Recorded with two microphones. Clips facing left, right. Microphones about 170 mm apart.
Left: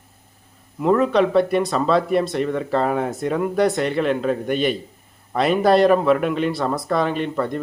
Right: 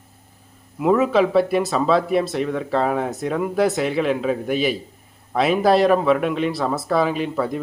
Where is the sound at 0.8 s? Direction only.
5° right (ahead or behind).